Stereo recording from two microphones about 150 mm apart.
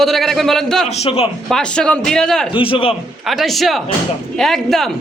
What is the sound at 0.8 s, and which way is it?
Speech, 45° left (ahead or behind).